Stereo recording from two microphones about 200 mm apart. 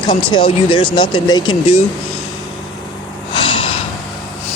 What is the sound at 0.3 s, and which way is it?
Speech, 25° left (ahead or behind).